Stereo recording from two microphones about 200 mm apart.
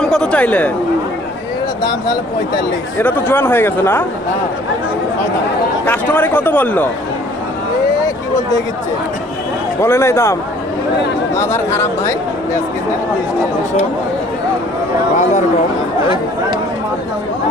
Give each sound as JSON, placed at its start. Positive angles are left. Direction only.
{"t": 0.0, "sound": "speech", "side_deg": 5}
{"t": 1.8, "sound": "speech", "side_deg": 20}
{"t": 3.0, "sound": "speech", "side_deg": 10}
{"t": 5.8, "sound": "speech", "side_deg": 10}
{"t": 9.8, "sound": "speech", "side_deg": 15}
{"t": 11.3, "sound": "speech", "side_deg": 10}
{"t": 15.1, "sound": "speech", "side_deg": 35}